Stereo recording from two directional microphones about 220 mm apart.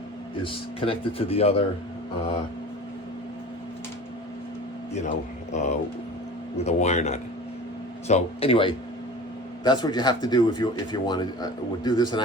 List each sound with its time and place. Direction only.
0.4 s speech: 25° left (ahead or behind)
4.9 s a man's voice: 30° left (ahead or behind)